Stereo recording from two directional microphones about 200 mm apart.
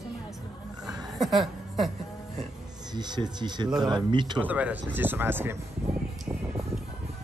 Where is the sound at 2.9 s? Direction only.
20° right (ahead or behind).